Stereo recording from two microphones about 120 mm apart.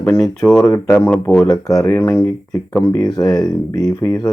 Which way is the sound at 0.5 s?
25° left (ahead or behind).